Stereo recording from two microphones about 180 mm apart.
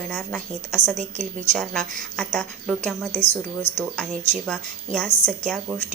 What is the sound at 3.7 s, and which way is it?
Speech, 30° left (ahead or behind).